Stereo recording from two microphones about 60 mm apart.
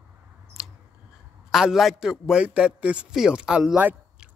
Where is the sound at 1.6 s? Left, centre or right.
Centre.